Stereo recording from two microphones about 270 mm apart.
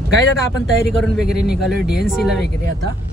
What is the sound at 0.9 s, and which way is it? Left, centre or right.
Speech, centre.